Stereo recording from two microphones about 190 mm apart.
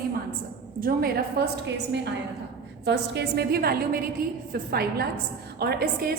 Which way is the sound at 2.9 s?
60° right (ahead or behind).